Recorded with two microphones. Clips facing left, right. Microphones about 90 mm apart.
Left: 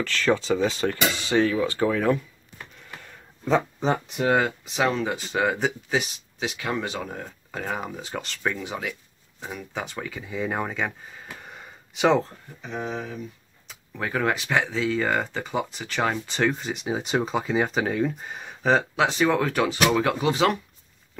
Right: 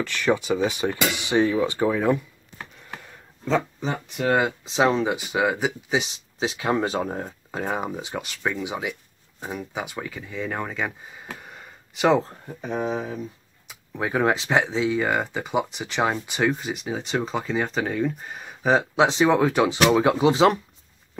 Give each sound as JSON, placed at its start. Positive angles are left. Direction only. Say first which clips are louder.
{"t": 0.0, "sound": "speech", "louder": "even", "side_deg": -15}
{"t": 4.6, "sound": "speech", "louder": "right 4 dB", "side_deg": -25}
{"t": 5.9, "sound": "speech", "louder": "right 1 dB", "side_deg": -20}
{"t": 7.5, "sound": "speech", "louder": "right 3 dB", "side_deg": -20}
{"t": 8.1, "sound": "speech", "louder": "right 1 dB", "side_deg": -10}
{"t": 10.3, "sound": "speech", "louder": "left 2 dB", "side_deg": 10}
{"t": 10.7, "sound": "speech", "louder": "even", "side_deg": -5}
{"t": 11.3, "sound": "gasp", "louder": "even", "side_deg": 0}
{"t": 12.4, "sound": "speech", "louder": "right 5 dB", "side_deg": -50}
{"t": 12.8, "sound": "speech", "louder": "right 3 dB", "side_deg": -30}
{"t": 13.7, "sound": "speech", "louder": "right 3 dB", "side_deg": -15}
{"t": 16.8, "sound": "speech", "louder": "left 3 dB", "side_deg": 15}
{"t": 18.9, "sound": "speech", "louder": "right 3 dB", "side_deg": -20}